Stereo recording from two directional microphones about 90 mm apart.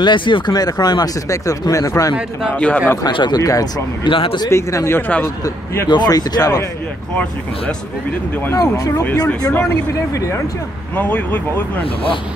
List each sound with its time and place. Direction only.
0.0 s speech: 65° left (ahead or behind)
0.6 s speech: 45° left (ahead or behind)
2.5 s speech: 15° left (ahead or behind)
3.1 s speech: 65° left (ahead or behind)
3.3 s speech: 40° left (ahead or behind)
4.0 s speech: 75° left (ahead or behind)
4.5 s speech: 35° left (ahead or behind)
5.9 s speech: 50° left (ahead or behind)
8.5 s speech: 40° left (ahead or behind)
11.0 s speech: 20° left (ahead or behind)